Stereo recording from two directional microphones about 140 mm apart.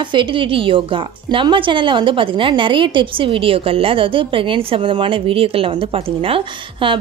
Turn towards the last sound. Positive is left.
turn(degrees=-40)  # may be behind; listen again after turning